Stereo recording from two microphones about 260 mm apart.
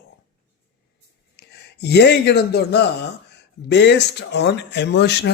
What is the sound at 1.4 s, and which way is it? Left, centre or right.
Speech, left.